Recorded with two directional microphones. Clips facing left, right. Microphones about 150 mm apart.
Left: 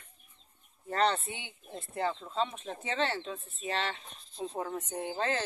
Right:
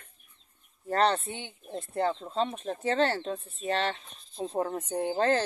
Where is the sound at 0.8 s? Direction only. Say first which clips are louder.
Right 3 dB; 35° right (ahead or behind).